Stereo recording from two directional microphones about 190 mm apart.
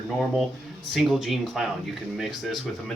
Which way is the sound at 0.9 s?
Centre (ahead or behind).